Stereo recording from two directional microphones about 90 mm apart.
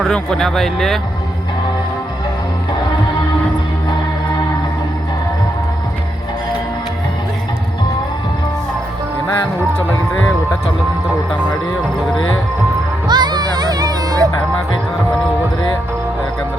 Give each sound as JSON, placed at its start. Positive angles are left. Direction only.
{"t": 0.0, "sound": "speech", "side_deg": 5}
{"t": 13.1, "sound": "music", "side_deg": -50}